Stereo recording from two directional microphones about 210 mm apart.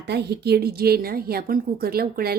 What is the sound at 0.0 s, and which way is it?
A woman's voice, 50° right (ahead or behind).